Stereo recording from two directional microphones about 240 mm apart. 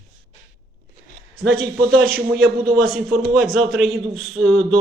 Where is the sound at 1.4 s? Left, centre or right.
Right.